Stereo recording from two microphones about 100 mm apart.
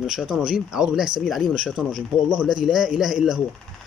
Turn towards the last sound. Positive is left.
turn(degrees=-5)  # may be behind; listen again after turning